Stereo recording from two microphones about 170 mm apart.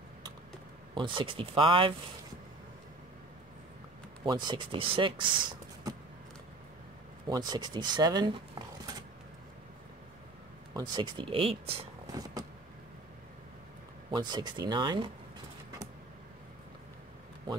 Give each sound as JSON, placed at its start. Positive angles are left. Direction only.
{"t": 0.9, "sound": "speech", "side_deg": -30}
{"t": 4.2, "sound": "speech", "side_deg": -25}
{"t": 7.2, "sound": "speech", "side_deg": -25}
{"t": 10.7, "sound": "speech", "side_deg": -25}
{"t": 12.1, "sound": "vehicle", "side_deg": -25}
{"t": 14.1, "sound": "speech", "side_deg": -25}